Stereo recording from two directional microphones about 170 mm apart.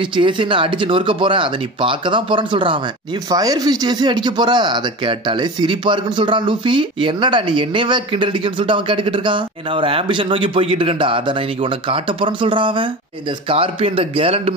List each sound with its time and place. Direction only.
0.0 s a man's voice: 30° right (ahead or behind)